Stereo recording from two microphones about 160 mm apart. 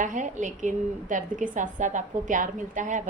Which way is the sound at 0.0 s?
50° right (ahead or behind).